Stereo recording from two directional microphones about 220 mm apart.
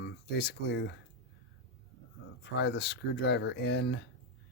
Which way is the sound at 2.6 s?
50° left (ahead or behind).